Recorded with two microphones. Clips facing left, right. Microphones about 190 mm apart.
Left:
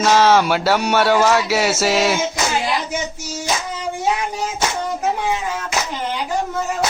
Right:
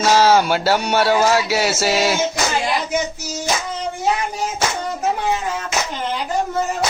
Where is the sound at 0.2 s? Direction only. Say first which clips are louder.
Even; 30° right (ahead or behind).